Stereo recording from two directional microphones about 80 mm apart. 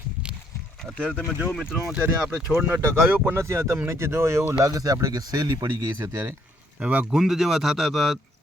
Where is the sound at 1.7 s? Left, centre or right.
Centre.